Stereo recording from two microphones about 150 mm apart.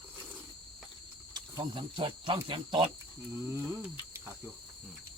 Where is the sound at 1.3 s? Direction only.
30° right (ahead or behind).